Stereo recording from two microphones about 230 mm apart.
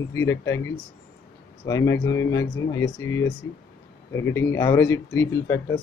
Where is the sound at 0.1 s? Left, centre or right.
Centre.